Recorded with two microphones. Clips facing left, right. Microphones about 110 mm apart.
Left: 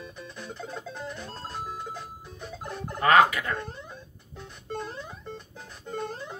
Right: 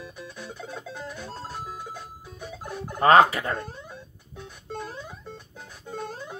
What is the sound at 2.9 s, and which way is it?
Speech, 30° right (ahead or behind).